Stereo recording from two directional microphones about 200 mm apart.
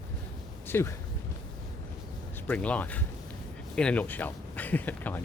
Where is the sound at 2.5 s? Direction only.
5° left (ahead or behind).